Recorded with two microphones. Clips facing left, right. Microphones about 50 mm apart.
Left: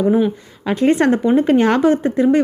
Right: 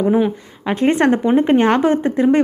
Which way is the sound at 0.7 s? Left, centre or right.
Right.